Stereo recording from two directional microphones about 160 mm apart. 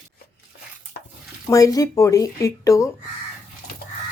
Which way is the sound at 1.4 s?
20° left (ahead or behind).